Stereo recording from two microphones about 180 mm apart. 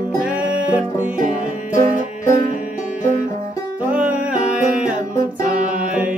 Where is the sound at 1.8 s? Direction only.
50° right (ahead or behind).